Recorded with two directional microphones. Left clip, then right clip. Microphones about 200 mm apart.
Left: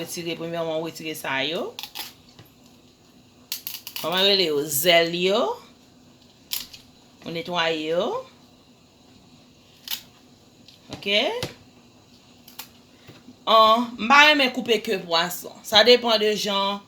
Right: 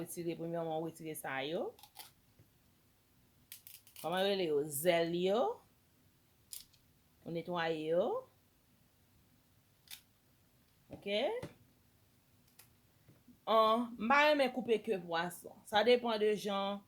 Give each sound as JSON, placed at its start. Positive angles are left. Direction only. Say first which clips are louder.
{"t": 0.1, "sound": "speech", "louder": "left 11 dB", "side_deg": -55}
{"t": 4.0, "sound": "speech", "louder": "left 14 dB", "side_deg": -55}
{"t": 7.3, "sound": "speech", "louder": "left 13 dB", "side_deg": -55}
{"t": 11.0, "sound": "speech", "louder": "left 14 dB", "side_deg": -55}
{"t": 13.4, "sound": "speech", "louder": "left 14 dB", "side_deg": -55}